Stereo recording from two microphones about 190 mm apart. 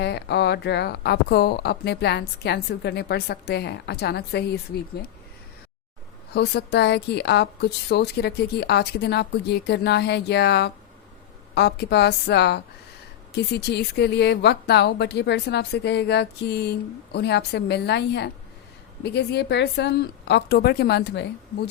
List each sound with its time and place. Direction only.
0.0 s speech: 60° left (ahead or behind)
6.3 s speech: 60° left (ahead or behind)